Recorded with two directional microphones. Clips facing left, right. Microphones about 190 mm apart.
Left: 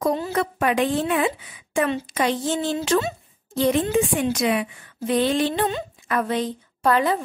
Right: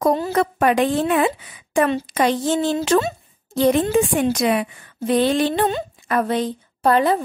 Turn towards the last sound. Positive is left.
turn(degrees=-30)  # may be behind; listen again after turning